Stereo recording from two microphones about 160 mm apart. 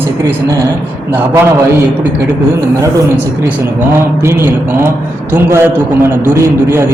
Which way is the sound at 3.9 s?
15° right (ahead or behind).